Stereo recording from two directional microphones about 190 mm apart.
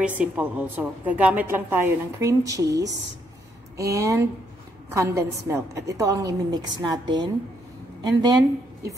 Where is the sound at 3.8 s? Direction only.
15° right (ahead or behind).